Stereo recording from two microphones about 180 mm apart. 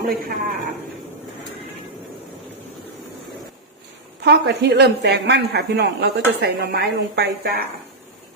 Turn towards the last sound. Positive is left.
turn(degrees=-60)  # may be behind; listen again after turning